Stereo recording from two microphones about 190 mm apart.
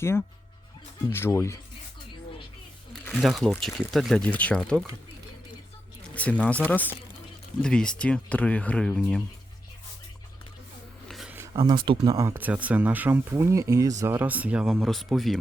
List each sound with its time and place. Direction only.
0.0 s speech: 15° left (ahead or behind)
2.9 s speech: centre (ahead or behind)
6.1 s speech: 5° left (ahead or behind)
11.1 s a sound: centre (ahead or behind)
11.3 s speech: 20° right (ahead or behind); by 15.4 s centre (ahead or behind)